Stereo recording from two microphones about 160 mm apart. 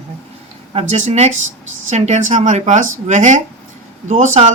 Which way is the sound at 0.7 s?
45° right (ahead or behind).